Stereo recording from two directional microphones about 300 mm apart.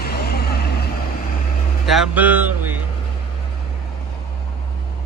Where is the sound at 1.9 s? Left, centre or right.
Centre.